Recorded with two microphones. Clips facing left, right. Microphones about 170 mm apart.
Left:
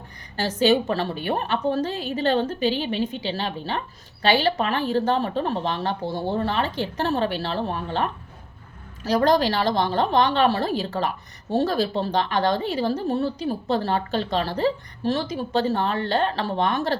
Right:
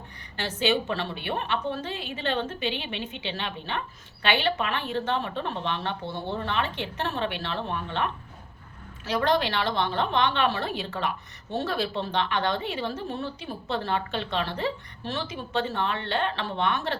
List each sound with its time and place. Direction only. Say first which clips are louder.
0.3 s a woman's voice: left 6 dB; 40° left (ahead or behind)